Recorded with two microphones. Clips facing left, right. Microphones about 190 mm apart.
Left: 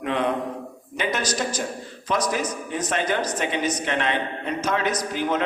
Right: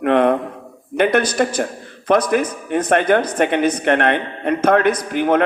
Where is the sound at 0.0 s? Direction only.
60° right (ahead or behind).